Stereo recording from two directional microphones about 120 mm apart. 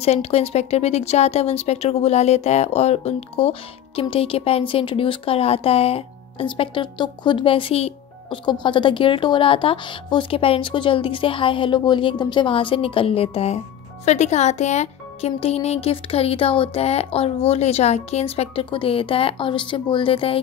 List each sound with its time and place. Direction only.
0.0 s speech: 60° left (ahead or behind)
8.5 s a woman's voice: 40° left (ahead or behind); by 13.6 s 55° left (ahead or behind)
14.0 s speech: 70° left (ahead or behind); by 20.3 s 50° left (ahead or behind)